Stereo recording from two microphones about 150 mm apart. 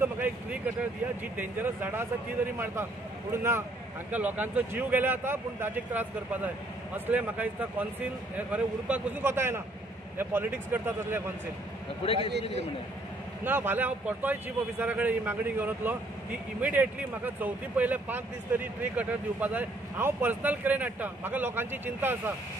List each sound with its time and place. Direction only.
0.0 s a sound: 15° right (ahead or behind)
1.3 s a man's voice: 10° right (ahead or behind)
13.4 s a man's voice: 15° right (ahead or behind)